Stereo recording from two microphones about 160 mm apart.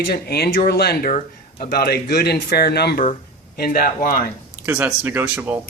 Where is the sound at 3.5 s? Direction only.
70° left (ahead or behind).